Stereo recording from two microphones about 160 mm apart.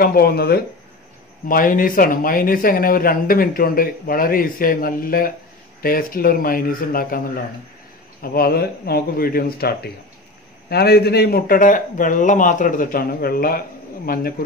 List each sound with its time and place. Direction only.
0.0 s speech: 70° left (ahead or behind)
1.5 s speech: 60° left (ahead or behind)